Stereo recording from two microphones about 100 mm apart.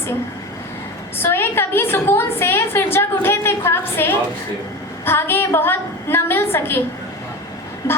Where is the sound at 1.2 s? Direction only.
20° left (ahead or behind).